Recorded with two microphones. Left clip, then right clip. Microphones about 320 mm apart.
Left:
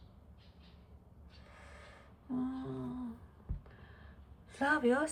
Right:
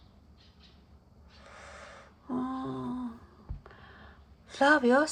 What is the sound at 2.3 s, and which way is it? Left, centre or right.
Speech, centre.